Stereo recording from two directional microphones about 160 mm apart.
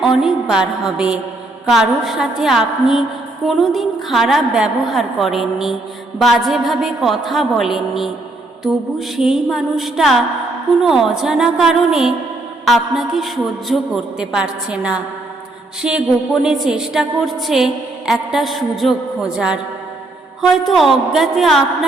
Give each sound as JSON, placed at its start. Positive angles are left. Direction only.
{"t": 0.0, "sound": "a woman's voice", "side_deg": 0}